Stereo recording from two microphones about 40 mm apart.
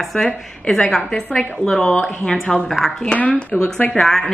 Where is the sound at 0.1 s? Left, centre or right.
Left.